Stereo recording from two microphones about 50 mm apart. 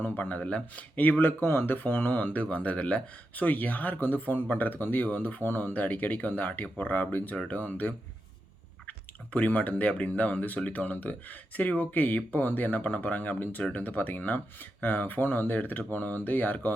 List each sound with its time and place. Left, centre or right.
0.0 s speech: left
1.2 s speech: left